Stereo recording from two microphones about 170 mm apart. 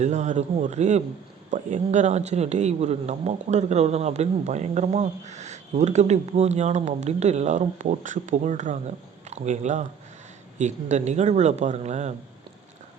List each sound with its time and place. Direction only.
0.0 s speech: 45° right (ahead or behind)